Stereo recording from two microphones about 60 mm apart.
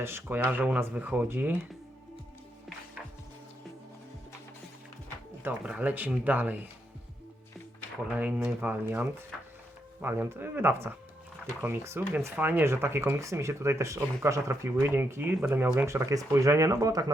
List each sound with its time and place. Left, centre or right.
0.0 s speech: right
5.6 s speech: centre
8.1 s speech: right
9.3 s a sound: centre
10.0 s speech: right
12.4 s speech: right
15.9 s speech: right